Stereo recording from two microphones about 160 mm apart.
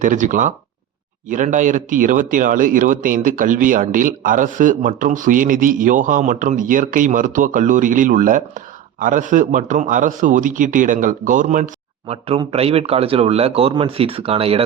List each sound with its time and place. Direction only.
0.0 s a man's voice: 50° right (ahead or behind)
12.1 s speech: 35° right (ahead or behind)